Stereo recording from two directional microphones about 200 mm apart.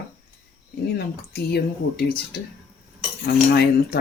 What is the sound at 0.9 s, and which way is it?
Speech, 55° left (ahead or behind).